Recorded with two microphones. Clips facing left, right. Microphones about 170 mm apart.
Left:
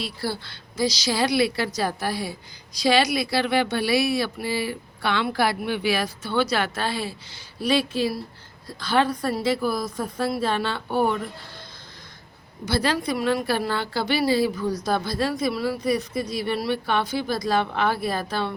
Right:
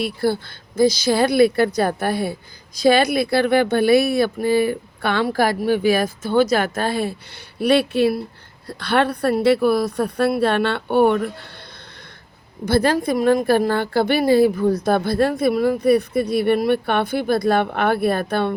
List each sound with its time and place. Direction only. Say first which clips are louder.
0.0 s speech: right 9 dB; 50° right (ahead or behind)
7.6 s a woman's voice: right 6 dB; 60° right (ahead or behind)
12.6 s a woman's voice: right 6 dB; 50° right (ahead or behind)